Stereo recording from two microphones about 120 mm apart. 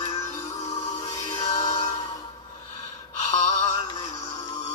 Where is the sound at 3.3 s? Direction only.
75° left (ahead or behind).